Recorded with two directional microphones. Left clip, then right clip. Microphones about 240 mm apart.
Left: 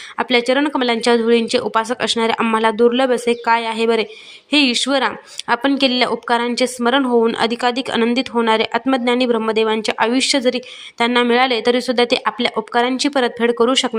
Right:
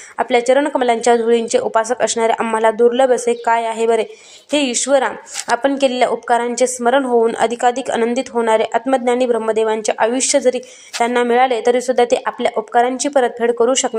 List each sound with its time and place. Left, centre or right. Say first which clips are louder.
0.2 s speech: right 2 dB; left